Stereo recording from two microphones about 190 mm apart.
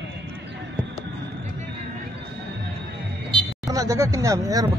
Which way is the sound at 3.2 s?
20° right (ahead or behind).